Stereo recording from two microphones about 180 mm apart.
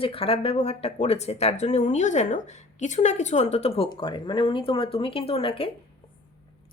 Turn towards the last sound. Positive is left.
turn(degrees=30)  # may be behind; listen again after turning